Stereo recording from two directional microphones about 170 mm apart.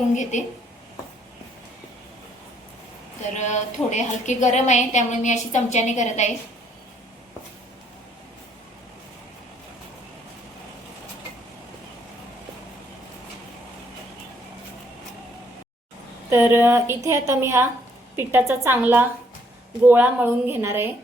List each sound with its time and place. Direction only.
0.1 s a woman's voice: 45° left (ahead or behind)
3.3 s a woman's voice: 45° left (ahead or behind)
16.3 s a woman's voice: 10° right (ahead or behind)